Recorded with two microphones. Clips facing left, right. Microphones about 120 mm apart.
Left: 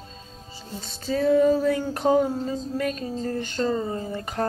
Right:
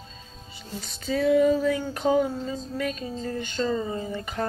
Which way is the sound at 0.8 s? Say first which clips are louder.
Left 1 dB; 30° left (ahead or behind).